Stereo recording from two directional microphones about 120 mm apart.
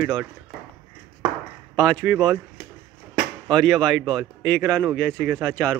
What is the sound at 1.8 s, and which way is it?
Speech, 5° left (ahead or behind).